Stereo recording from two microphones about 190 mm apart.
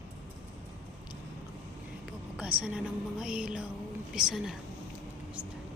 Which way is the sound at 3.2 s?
5° right (ahead or behind).